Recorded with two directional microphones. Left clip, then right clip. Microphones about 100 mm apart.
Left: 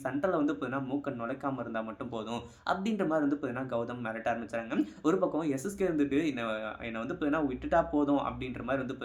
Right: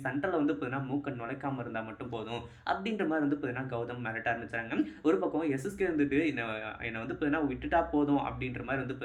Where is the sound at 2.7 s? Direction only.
40° left (ahead or behind).